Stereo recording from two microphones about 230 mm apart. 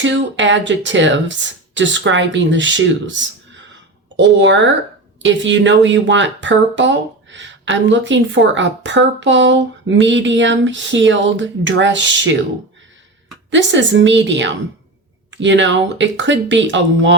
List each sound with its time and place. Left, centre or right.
0.0 s speech: right
13.5 s speech: right